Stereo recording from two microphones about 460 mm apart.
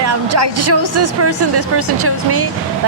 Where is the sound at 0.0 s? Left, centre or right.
Right.